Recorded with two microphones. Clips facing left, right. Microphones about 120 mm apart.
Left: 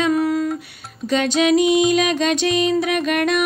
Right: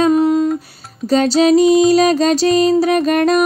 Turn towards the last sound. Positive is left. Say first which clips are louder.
# right 6 dB
turn(degrees=-35)  # may be behind; listen again after turning